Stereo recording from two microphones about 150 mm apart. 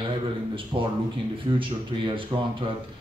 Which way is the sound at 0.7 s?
25° right (ahead or behind).